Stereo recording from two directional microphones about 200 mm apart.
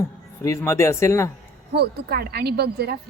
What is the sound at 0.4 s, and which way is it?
Speech, 15° left (ahead or behind).